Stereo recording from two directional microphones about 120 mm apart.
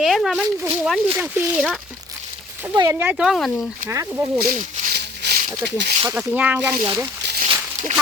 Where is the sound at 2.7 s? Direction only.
35° right (ahead or behind).